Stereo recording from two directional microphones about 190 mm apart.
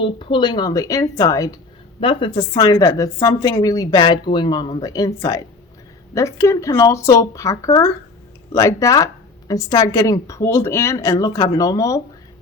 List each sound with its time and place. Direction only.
0.0 s a woman's voice: 25° left (ahead or behind)